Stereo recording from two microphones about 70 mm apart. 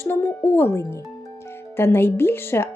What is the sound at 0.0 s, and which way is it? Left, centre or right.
Speech, left.